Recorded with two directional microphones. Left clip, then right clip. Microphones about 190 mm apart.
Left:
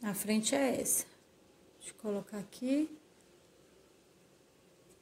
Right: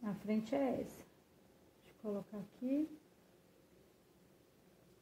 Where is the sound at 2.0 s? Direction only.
30° left (ahead or behind).